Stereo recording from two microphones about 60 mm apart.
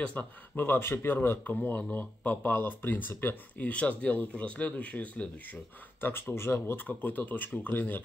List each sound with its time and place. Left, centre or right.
0.0 s speech: left
0.6 s speech: left
1.4 s speech: left
5.9 s speech: left
6.9 s speech: left